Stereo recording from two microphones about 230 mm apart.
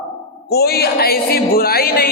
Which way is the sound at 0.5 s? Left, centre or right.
Left.